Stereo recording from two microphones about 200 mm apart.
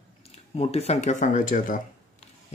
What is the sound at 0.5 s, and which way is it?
Speech, 30° left (ahead or behind).